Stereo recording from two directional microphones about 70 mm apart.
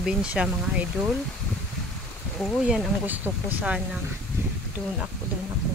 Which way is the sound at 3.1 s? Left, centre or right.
Right.